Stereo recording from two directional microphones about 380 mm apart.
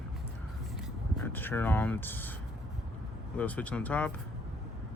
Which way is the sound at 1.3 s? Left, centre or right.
Centre.